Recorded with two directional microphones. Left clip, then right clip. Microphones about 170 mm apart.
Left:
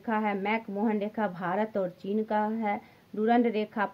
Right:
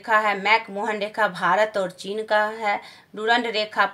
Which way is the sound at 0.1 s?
35° left (ahead or behind).